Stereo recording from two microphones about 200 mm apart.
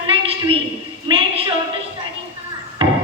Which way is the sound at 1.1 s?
25° right (ahead or behind).